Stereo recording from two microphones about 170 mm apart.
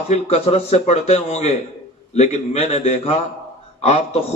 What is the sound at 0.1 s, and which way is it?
A man's voice, 35° left (ahead or behind).